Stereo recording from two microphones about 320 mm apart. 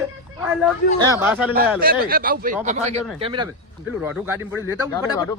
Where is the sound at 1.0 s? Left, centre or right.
Centre.